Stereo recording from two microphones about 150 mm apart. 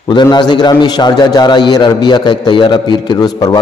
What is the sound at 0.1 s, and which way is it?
A man's voice, 30° left (ahead or behind).